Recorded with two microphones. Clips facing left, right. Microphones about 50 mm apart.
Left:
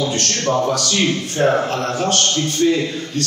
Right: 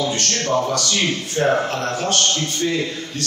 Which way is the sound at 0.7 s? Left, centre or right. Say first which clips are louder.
Left 3 dB; centre.